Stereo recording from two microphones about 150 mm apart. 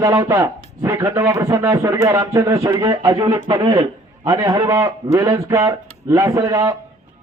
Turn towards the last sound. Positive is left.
turn(degrees=-25)  # may be behind; listen again after turning